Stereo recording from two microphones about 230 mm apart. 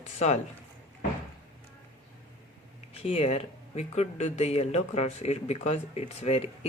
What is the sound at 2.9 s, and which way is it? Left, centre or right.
Speech, left.